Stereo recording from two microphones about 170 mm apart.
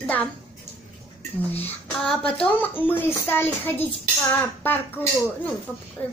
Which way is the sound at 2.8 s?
10° left (ahead or behind).